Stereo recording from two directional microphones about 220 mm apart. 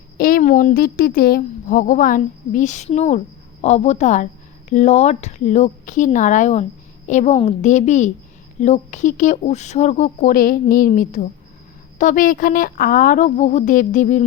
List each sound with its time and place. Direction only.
0.2 s a woman's voice: 40° left (ahead or behind)